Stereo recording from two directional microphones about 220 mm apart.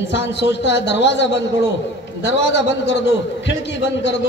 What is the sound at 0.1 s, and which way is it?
A man's voice, 55° left (ahead or behind).